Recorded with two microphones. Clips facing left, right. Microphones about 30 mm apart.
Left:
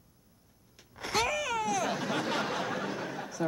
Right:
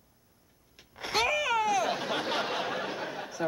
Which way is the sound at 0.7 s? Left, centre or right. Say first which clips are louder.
Right 1 dB; centre.